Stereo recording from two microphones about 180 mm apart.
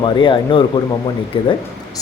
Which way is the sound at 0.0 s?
25° left (ahead or behind).